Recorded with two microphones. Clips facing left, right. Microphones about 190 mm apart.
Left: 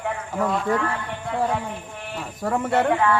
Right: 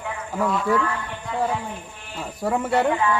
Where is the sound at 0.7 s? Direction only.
55° left (ahead or behind).